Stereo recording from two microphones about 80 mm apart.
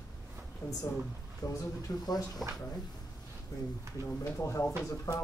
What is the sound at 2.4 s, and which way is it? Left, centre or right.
Speech, centre.